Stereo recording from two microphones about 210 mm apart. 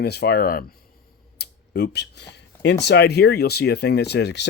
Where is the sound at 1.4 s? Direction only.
50° left (ahead or behind).